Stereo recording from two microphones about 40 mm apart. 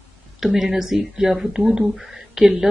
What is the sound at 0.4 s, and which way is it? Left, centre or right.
Speech, centre.